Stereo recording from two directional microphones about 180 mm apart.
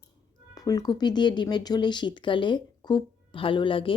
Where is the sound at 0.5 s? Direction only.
20° left (ahead or behind).